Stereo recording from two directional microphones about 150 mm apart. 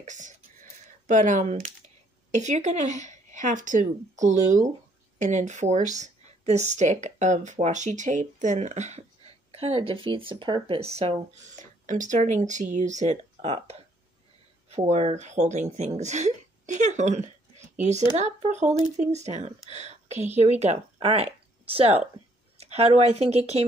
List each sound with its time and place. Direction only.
0.0 s a sound: 55° right (ahead or behind)
2.3 s speech: 50° right (ahead or behind)
11.8 s speech: 60° right (ahead or behind)
14.9 s speech: 45° right (ahead or behind)